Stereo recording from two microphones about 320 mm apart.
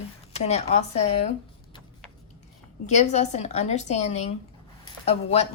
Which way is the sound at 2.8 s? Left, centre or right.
Left.